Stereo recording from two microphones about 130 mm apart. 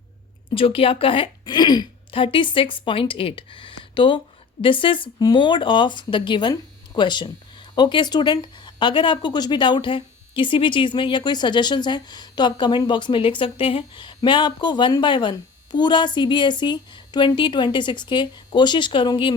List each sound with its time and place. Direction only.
0.5 s speech: 45° left (ahead or behind)